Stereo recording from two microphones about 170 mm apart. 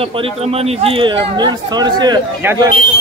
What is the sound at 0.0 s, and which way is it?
Speech, 35° right (ahead or behind).